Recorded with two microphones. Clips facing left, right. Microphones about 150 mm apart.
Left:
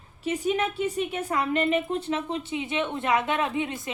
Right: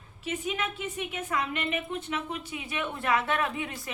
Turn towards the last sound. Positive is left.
turn(degrees=20)  # may be behind; listen again after turning